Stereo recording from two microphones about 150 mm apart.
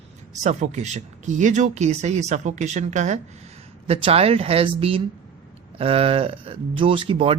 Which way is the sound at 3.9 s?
40° right (ahead or behind).